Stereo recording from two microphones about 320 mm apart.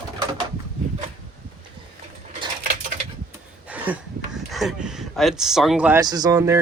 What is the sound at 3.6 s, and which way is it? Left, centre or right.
Speech, centre.